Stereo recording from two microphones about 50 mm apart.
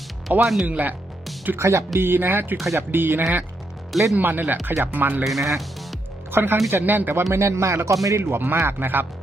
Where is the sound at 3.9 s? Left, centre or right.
Centre.